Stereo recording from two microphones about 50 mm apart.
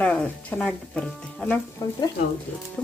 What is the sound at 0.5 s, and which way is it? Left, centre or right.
Speech, centre.